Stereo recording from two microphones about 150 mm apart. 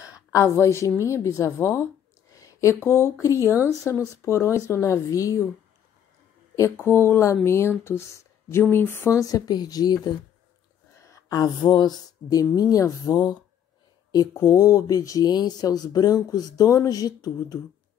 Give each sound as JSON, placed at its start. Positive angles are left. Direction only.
{"t": 0.0, "sound": "a woman's voice", "side_deg": 20}
{"t": 3.4, "sound": "speech", "side_deg": -15}
{"t": 4.2, "sound": "speech", "side_deg": 20}
{"t": 6.5, "sound": "speech", "side_deg": 20}